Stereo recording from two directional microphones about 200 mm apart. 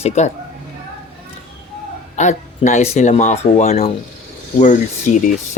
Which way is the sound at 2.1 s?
35° left (ahead or behind).